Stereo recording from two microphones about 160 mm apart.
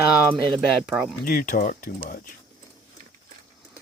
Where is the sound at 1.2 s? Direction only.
65° left (ahead or behind).